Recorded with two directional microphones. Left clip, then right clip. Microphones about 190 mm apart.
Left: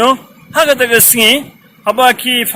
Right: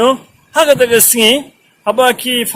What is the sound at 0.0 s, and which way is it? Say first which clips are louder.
A man's voice: left 1 dB; 15° right (ahead or behind).